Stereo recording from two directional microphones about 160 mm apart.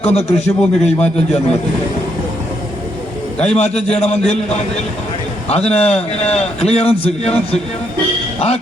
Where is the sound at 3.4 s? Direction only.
45° left (ahead or behind).